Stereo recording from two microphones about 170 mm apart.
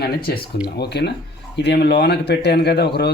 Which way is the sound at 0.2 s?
65° left (ahead or behind).